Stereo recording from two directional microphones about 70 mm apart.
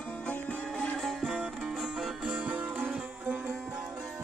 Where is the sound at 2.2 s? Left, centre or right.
Centre.